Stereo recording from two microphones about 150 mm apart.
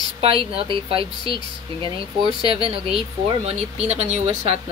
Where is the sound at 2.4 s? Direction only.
35° right (ahead or behind).